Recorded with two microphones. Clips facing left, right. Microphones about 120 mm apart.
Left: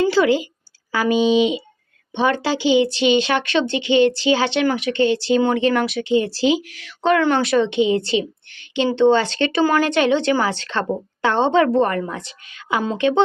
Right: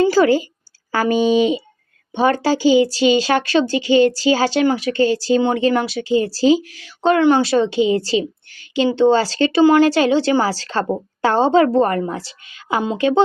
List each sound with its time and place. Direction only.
0.1 s a woman's voice: 45° right (ahead or behind); by 7.5 s 20° right (ahead or behind)
7.5 s speech: 35° right (ahead or behind)